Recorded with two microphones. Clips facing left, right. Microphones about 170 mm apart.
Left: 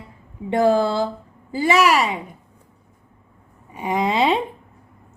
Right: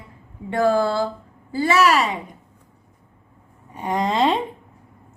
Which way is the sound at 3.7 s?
10° left (ahead or behind).